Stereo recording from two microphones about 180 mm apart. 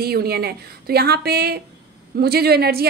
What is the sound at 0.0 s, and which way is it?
A woman's voice, 60° right (ahead or behind).